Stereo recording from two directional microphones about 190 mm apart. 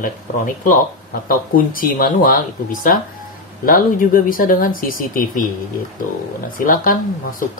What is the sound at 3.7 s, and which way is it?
Speech, 50° left (ahead or behind).